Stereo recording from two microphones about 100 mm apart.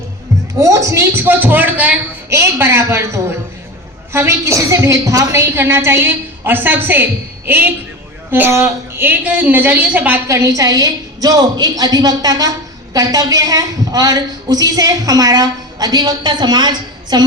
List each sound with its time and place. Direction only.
0.6 s a woman's voice: 30° right (ahead or behind); by 2.0 s 15° right (ahead or behind)
2.3 s a woman's voice: 25° right (ahead or behind)
10.2 s a woman's voice: 30° right (ahead or behind); by 17.2 s 45° right (ahead or behind)